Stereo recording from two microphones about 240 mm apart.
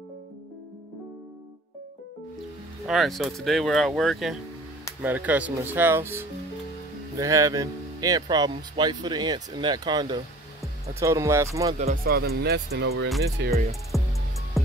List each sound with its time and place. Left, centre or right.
2.9 s speech: centre
11.8 s speech: right
13.4 s speech: right
13.9 s music: centre